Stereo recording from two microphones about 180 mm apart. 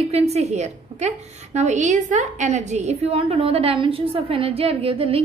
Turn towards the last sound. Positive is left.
turn(degrees=-30)  # may be behind; listen again after turning